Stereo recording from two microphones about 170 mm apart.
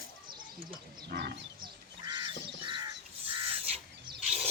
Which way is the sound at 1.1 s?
85° right.